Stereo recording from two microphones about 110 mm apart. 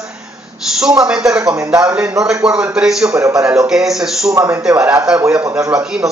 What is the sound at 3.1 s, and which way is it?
Speech, 25° right (ahead or behind).